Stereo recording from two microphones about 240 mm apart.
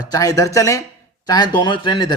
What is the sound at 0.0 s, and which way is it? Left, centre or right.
Speech, centre.